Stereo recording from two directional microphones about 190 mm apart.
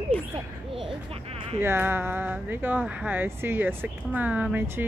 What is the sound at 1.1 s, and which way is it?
Speech, 30° right (ahead or behind).